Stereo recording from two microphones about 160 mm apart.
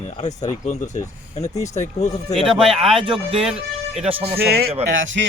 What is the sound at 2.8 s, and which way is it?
Speech, 30° right (ahead or behind).